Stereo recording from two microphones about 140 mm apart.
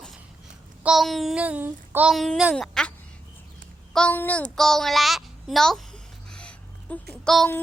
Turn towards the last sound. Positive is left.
turn(degrees=5)  # may be behind; listen again after turning